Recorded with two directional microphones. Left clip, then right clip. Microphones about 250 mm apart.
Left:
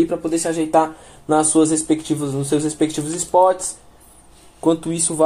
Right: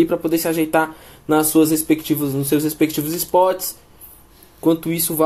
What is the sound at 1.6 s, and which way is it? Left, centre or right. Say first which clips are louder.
Speech: right 1 dB; right.